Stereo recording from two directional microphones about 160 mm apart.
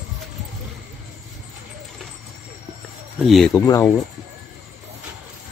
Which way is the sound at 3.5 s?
20° left (ahead or behind).